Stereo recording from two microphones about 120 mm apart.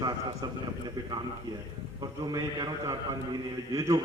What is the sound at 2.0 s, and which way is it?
A man's voice, 30° right (ahead or behind).